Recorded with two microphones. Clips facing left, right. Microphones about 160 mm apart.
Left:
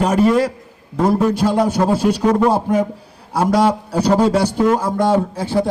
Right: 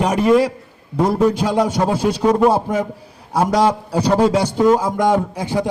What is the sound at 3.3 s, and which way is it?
A man's voice, 10° right (ahead or behind).